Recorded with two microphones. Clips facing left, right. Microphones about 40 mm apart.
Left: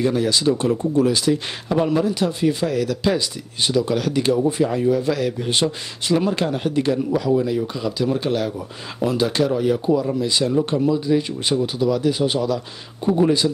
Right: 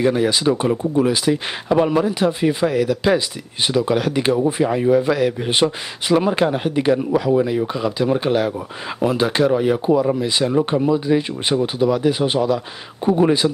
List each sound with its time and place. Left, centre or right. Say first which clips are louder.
0.0 s speech: right 2 dB; right